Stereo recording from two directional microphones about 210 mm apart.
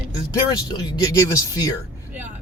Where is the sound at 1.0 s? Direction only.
15° left (ahead or behind).